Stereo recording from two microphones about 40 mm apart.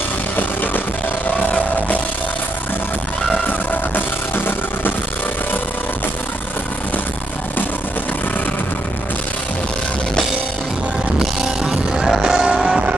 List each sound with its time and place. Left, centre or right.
3.4 s music: left
11.7 s music: centre